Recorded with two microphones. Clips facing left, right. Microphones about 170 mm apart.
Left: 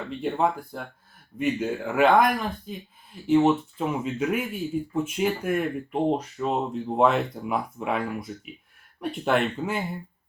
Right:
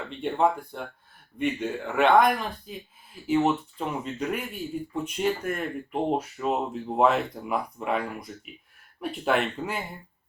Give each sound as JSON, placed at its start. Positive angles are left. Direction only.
{"t": 0.2, "sound": "speech", "side_deg": 0}
{"t": 6.1, "sound": "speech", "side_deg": -5}